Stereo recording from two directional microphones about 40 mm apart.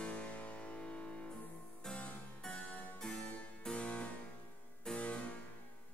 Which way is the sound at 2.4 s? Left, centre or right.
Centre.